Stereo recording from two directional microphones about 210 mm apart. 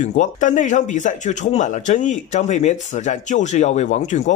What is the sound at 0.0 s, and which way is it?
Speech, 35° left (ahead or behind).